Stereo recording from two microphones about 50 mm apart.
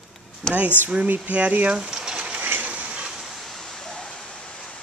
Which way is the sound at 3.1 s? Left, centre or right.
Centre.